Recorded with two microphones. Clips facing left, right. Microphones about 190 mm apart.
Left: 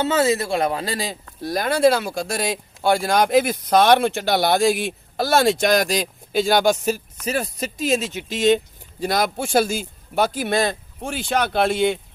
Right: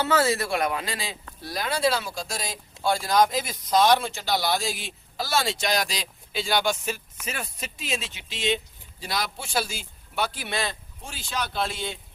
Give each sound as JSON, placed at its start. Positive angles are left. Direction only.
{"t": 0.0, "sound": "speech", "side_deg": 20}